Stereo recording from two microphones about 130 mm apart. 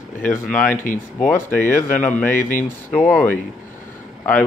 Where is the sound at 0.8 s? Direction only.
90° left.